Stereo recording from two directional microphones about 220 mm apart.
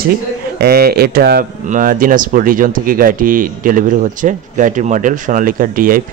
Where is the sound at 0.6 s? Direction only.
45° right (ahead or behind).